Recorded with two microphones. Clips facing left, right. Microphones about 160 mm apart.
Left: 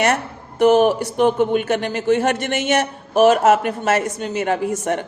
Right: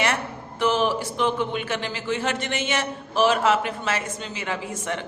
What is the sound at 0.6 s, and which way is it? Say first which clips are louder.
Speech: left 9 dB; 50° left (ahead or behind).